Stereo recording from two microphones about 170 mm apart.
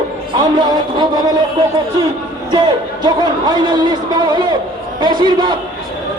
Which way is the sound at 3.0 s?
25° right (ahead or behind).